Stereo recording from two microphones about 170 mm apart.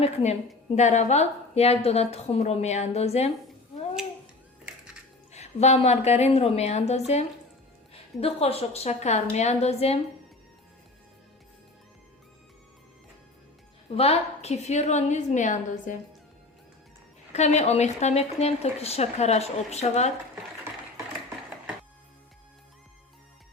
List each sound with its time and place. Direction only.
0.0 s speech: 40° left (ahead or behind)
5.3 s speech: 40° left (ahead or behind)
13.9 s a woman's voice: 35° left (ahead or behind)
17.3 s speech: 40° left (ahead or behind)